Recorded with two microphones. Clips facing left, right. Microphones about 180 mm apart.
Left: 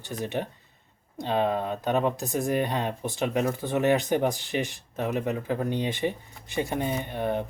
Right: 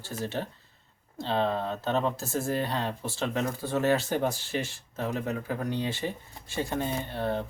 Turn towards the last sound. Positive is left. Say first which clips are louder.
# left 2 dB
turn(degrees=15)  # may be behind; listen again after turning